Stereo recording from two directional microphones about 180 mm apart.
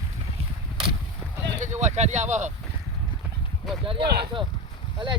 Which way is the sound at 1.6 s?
40° right (ahead or behind).